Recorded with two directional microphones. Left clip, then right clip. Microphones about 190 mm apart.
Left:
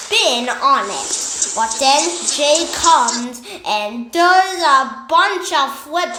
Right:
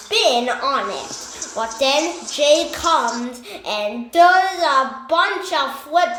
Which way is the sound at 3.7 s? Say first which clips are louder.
Left 3 dB; 5° left (ahead or behind).